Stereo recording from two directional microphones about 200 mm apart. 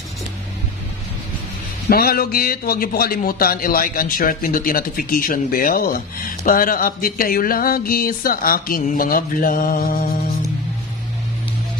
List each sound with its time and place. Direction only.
1.9 s a man's voice: 50° left (ahead or behind)